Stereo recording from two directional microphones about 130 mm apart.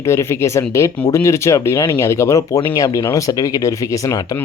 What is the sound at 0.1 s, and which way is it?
Speech, 20° left (ahead or behind).